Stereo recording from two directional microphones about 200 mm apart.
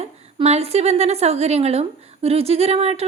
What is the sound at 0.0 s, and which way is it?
A woman's voice, 30° right (ahead or behind).